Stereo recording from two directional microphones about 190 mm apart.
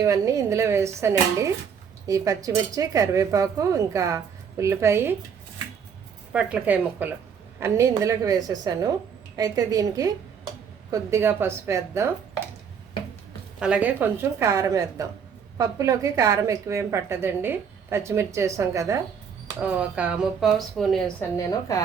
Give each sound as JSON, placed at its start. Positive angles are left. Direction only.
{"t": 0.0, "sound": "a woman's voice", "side_deg": -15}
{"t": 6.3, "sound": "a woman's voice", "side_deg": -10}
{"t": 13.6, "sound": "a woman's voice", "side_deg": -5}
{"t": 21.7, "sound": "a woman's voice", "side_deg": 15}